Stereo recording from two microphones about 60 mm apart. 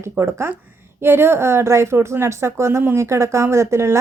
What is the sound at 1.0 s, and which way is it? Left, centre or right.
A woman's voice, right.